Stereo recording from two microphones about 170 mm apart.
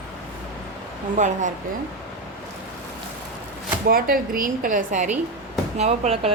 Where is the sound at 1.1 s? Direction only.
45° right (ahead or behind).